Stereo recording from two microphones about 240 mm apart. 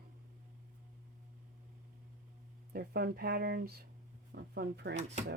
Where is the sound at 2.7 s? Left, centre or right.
Right.